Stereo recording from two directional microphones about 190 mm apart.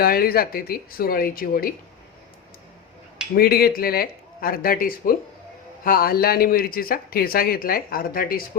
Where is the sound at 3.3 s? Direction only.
55° left (ahead or behind).